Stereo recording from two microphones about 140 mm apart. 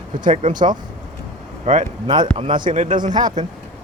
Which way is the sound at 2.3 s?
40° right (ahead or behind).